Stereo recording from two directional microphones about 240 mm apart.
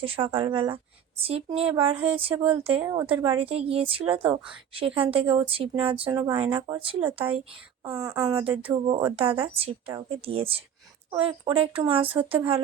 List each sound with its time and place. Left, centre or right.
0.0 s speech: right
2.8 s speech: centre
7.9 s speech: centre